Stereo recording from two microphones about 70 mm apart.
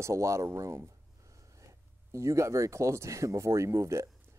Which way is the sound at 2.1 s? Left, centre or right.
Right.